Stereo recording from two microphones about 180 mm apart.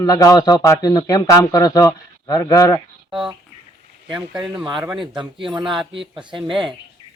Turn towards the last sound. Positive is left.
turn(degrees=-25)  # may be behind; listen again after turning